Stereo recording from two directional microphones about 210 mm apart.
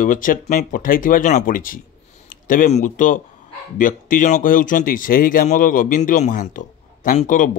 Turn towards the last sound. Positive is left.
turn(degrees=40)  # may be behind; listen again after turning